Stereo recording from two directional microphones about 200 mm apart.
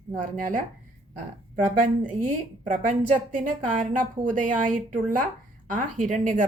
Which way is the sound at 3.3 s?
40° right (ahead or behind).